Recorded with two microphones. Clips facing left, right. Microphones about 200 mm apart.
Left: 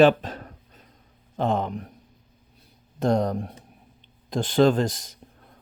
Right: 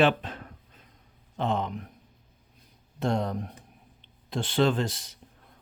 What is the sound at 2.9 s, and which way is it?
Speech, 40° left (ahead or behind).